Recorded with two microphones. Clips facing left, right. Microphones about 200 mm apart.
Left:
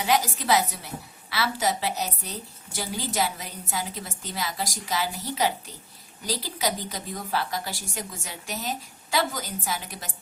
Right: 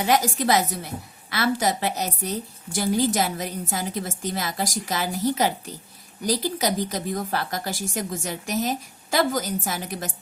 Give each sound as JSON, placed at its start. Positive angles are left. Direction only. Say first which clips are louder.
{"t": 0.0, "sound": "a woman's voice", "louder": "right 3 dB", "side_deg": -45}